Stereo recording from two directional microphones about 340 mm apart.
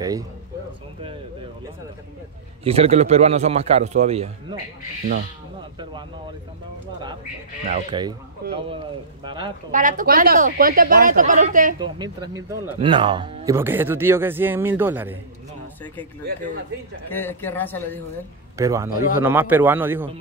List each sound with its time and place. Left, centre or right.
2.6 s a man's voice: centre
5.6 s speech: centre
7.6 s a man's voice: centre
12.0 s a man's voice: centre
17.1 s a man's voice: centre
18.6 s a man's voice: centre